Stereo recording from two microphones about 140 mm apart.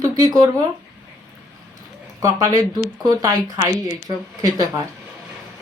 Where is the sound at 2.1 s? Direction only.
20° right (ahead or behind).